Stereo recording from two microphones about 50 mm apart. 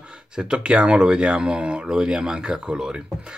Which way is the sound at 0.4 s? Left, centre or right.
Right.